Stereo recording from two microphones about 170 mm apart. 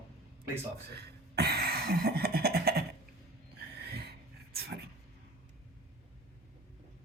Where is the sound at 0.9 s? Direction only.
70° right (ahead or behind).